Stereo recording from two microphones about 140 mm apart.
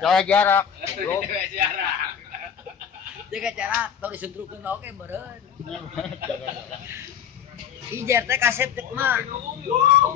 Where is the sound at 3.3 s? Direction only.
5° right (ahead or behind).